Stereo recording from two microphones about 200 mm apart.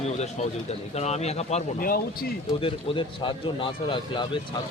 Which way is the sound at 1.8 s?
50° left (ahead or behind).